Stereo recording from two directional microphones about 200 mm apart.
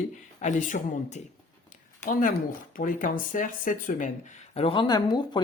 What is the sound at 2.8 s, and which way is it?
Speech, 40° left (ahead or behind).